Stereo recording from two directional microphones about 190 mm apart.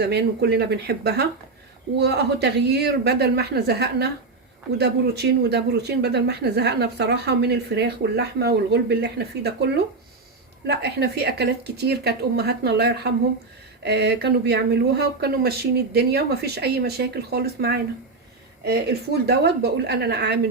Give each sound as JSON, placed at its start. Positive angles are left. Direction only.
{"t": 0.0, "sound": "speech", "side_deg": -60}